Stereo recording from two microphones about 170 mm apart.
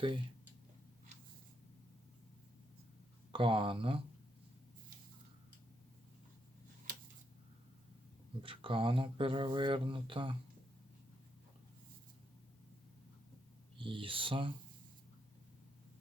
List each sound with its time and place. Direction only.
3.3 s speech: 30° right (ahead or behind)
8.4 s speech: 30° right (ahead or behind)
13.7 s speech: 30° right (ahead or behind)